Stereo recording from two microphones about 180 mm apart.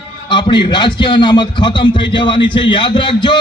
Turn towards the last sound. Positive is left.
turn(degrees=25)  # may be behind; listen again after turning